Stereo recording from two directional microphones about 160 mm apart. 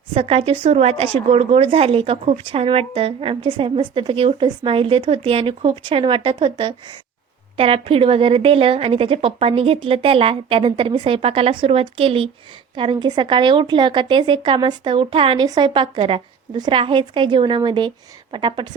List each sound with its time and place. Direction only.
0.1 s a woman's voice: 35° right (ahead or behind)